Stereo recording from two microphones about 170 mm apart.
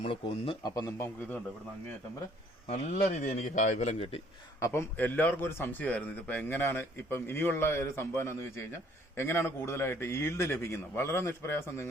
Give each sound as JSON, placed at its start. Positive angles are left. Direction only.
{"t": 0.0, "sound": "speech", "side_deg": 35}
{"t": 2.6, "sound": "a man's voice", "side_deg": 45}
{"t": 4.6, "sound": "a man's voice", "side_deg": 15}